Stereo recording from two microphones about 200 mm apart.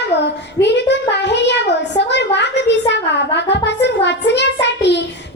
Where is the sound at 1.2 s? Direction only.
60° left (ahead or behind).